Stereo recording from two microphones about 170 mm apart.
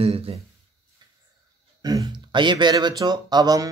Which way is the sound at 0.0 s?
35° right (ahead or behind).